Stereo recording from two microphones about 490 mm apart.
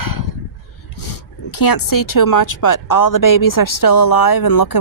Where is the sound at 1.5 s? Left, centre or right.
Left.